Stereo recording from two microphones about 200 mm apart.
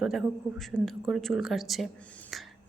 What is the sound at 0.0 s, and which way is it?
Speech, centre (ahead or behind).